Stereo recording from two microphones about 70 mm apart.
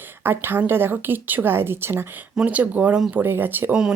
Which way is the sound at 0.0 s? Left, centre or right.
Right.